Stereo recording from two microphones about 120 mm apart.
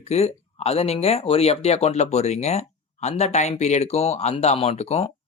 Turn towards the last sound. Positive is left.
turn(degrees=60)  # may be behind; listen again after turning